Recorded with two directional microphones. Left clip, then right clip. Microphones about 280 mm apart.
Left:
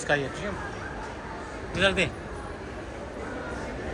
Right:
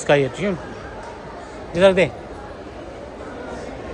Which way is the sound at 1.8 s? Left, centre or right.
Right.